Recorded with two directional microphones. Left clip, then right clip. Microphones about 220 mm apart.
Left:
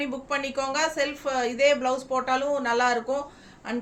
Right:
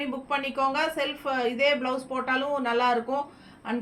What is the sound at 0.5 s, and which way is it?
Speech, 20° left (ahead or behind).